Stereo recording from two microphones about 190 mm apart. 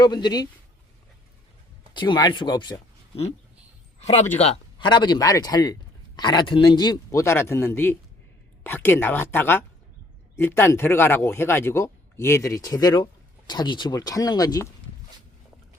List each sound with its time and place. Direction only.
0.0 s speech: 20° left (ahead or behind)
1.9 s speech: 25° left (ahead or behind)
4.0 s a man's voice: 35° left (ahead or behind); by 14.7 s 20° left (ahead or behind)